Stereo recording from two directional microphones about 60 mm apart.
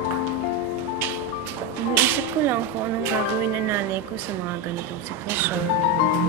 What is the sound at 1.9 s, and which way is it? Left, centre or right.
Speech, right.